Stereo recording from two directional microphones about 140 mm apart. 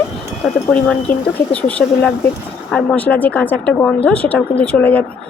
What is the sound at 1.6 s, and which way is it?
Speech, 10° left (ahead or behind).